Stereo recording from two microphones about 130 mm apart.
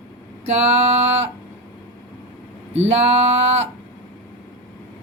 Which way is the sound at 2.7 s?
55° right (ahead or behind).